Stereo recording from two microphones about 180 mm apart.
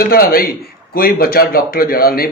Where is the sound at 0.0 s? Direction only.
55° left (ahead or behind).